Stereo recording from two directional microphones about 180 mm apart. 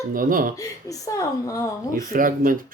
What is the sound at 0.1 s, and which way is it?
Speech, 50° right (ahead or behind).